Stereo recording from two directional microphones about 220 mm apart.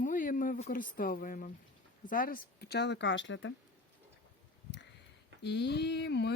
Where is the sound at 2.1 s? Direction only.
40° left (ahead or behind); by 3.5 s 55° left (ahead or behind).